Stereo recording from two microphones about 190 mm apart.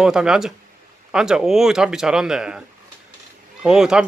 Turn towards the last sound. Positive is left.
turn(degrees=-5)  # may be behind; listen again after turning